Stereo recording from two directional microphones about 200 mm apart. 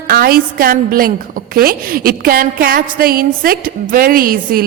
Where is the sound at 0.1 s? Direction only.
50° right (ahead or behind).